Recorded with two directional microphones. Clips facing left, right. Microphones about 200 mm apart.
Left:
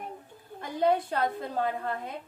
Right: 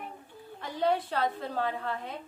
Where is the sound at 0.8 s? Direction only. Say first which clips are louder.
Left 2 dB; 15° left (ahead or behind).